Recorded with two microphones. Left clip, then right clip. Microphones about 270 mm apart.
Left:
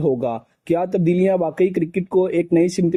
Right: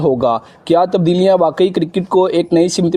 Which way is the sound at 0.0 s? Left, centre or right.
Right.